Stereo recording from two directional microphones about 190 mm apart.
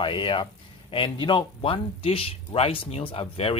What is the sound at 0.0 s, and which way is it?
Speech, 25° left (ahead or behind).